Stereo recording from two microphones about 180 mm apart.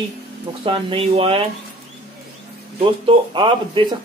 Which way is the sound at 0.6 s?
30° right (ahead or behind).